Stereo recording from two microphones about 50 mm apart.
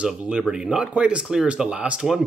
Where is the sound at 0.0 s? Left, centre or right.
Centre.